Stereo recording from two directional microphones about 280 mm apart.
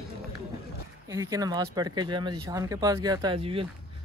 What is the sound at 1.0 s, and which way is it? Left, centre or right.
Speech, centre.